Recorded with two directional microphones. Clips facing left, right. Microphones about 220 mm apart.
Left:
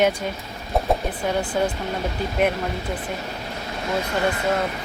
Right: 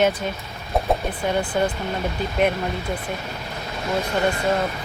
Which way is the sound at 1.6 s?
5° left (ahead or behind).